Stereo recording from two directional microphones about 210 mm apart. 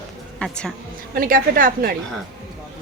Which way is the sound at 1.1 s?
40° right (ahead or behind).